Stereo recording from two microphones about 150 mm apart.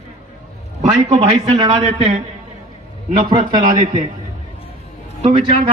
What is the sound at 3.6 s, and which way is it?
Speech, 60° right (ahead or behind).